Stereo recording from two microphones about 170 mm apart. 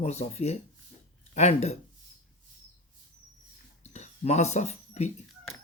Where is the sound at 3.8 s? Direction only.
40° left (ahead or behind).